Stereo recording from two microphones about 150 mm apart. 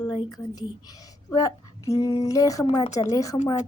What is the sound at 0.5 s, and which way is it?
Speech, 25° left (ahead or behind).